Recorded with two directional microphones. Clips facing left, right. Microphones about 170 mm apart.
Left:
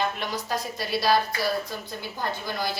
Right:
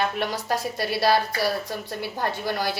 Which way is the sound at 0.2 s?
65° right (ahead or behind).